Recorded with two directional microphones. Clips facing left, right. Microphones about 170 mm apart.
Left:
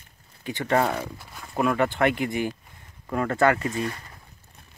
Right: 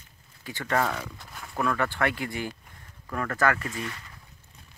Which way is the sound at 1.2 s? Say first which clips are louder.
Even; centre (ahead or behind).